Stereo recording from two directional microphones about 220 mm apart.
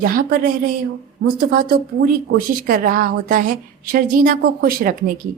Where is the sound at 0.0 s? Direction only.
40° right (ahead or behind).